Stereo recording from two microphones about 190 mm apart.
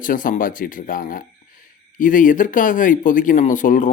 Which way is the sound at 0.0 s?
45° left (ahead or behind).